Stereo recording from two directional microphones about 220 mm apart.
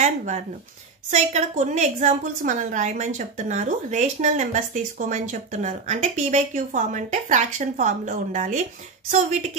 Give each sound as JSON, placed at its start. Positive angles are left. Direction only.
{"t": 0.0, "sound": "a woman's voice", "side_deg": -35}